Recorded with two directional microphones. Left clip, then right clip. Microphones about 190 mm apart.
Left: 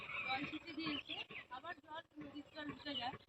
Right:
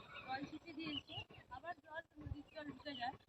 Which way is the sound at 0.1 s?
30° right (ahead or behind).